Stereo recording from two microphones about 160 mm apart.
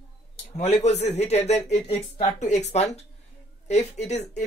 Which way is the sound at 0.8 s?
45° left (ahead or behind).